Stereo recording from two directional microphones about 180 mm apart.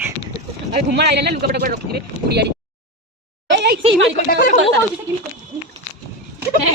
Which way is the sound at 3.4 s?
70° right (ahead or behind).